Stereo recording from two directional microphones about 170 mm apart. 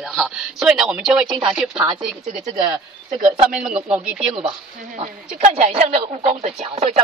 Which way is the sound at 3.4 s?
5° right (ahead or behind).